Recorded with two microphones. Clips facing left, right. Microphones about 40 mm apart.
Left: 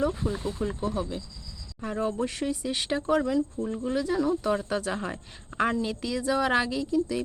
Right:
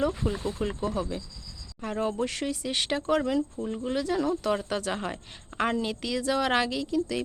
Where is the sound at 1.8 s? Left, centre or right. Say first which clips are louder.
Even; right.